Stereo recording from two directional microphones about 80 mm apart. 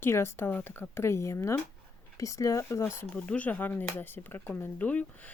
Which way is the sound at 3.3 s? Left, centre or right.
Centre.